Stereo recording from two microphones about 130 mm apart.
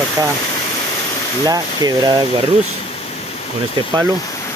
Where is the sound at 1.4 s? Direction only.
30° right (ahead or behind).